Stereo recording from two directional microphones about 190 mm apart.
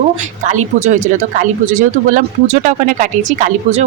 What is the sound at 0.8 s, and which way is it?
Speech, 40° right (ahead or behind).